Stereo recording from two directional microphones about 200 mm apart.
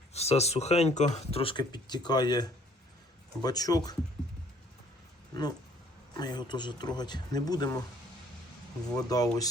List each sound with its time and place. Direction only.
0.1 s speech: 30° left (ahead or behind)
5.3 s speech: 20° left (ahead or behind)
9.0 s speech: 20° left (ahead or behind)